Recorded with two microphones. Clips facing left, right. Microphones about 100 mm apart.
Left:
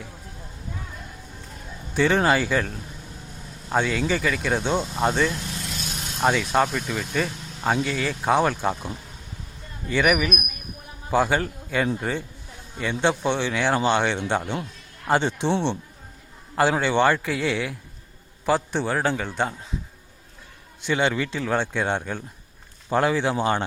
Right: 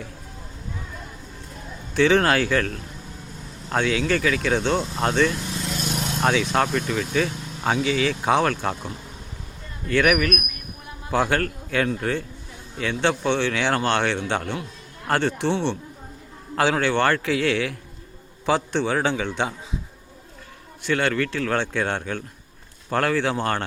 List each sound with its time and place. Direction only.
1.9 s speech: 5° left (ahead or behind)
9.9 s a man's voice: 10° left (ahead or behind)
20.8 s speech: 15° left (ahead or behind)